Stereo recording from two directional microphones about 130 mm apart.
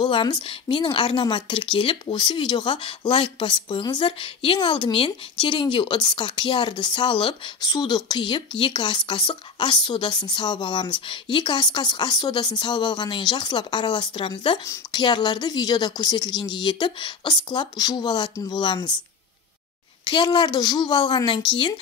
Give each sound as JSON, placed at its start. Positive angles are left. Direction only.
{"t": 0.0, "sound": "a woman's voice", "side_deg": 35}
{"t": 20.1, "sound": "a woman's voice", "side_deg": 40}